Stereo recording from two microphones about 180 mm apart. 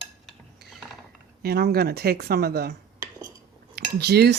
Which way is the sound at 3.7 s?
65° right (ahead or behind).